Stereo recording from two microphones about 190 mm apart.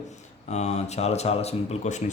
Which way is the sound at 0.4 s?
35° left (ahead or behind).